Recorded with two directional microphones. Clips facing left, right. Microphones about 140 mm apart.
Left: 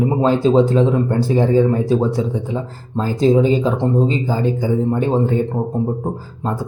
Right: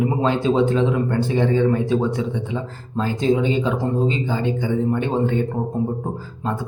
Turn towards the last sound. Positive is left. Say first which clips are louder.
# left 3 dB
turn(degrees=40)  # may be behind; listen again after turning